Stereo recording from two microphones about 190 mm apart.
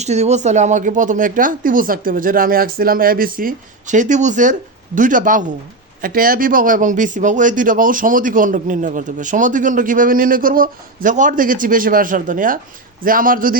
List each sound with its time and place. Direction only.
0.0 s a man's voice: 35° right (ahead or behind)